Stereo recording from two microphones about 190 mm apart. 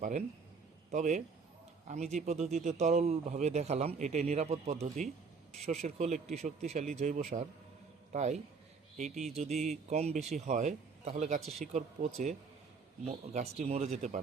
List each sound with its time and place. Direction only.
0.9 s a man's voice: 40° right (ahead or behind)
13.1 s speech: 35° right (ahead or behind)